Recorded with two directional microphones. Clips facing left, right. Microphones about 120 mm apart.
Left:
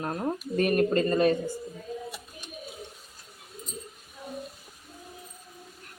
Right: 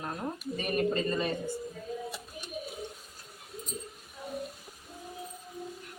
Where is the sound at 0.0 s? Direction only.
55° left (ahead or behind).